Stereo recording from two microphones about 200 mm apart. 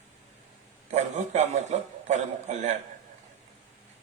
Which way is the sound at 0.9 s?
35° right (ahead or behind).